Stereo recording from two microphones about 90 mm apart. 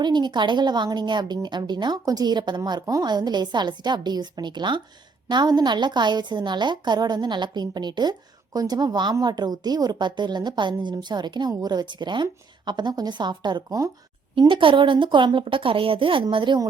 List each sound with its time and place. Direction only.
0.0 s a woman's voice: 55° right (ahead or behind)
14.3 s a woman's voice: 70° right (ahead or behind)